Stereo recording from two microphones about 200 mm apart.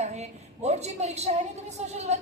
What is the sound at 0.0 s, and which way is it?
A woman's voice, 35° right (ahead or behind).